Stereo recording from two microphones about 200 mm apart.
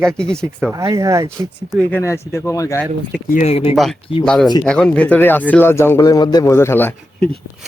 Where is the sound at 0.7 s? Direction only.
15° right (ahead or behind).